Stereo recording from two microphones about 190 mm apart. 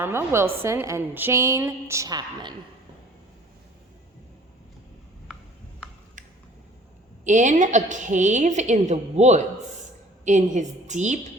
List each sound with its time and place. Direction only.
0.0 s a woman's voice: 10° right (ahead or behind)
7.3 s a woman's voice: 40° right (ahead or behind)